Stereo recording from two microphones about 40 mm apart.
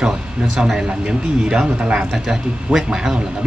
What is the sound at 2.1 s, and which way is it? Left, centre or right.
Speech, centre.